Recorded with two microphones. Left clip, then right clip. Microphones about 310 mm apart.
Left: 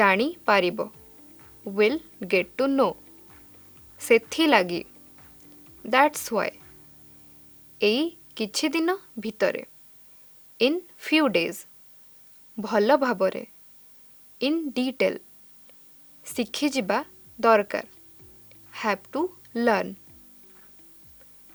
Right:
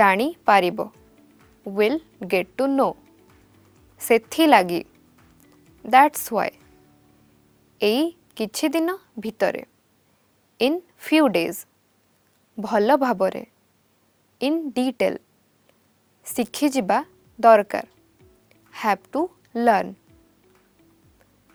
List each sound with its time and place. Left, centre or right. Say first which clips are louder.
0.0 s a woman's voice: right 3 dB; right
1.7 s a woman's voice: right 1 dB; right
3.9 s a woman's voice: right 2 dB; right
5.9 s a woman's voice: right 5 dB; right
7.8 s a woman's voice: right 2 dB; right
14.5 s a woman's voice: right 3 dB; right
16.2 s a woman's voice: right 4 dB; right
18.4 s music: right 5 dB; right